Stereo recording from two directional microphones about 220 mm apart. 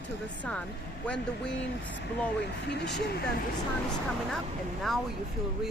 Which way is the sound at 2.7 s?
50° left (ahead or behind).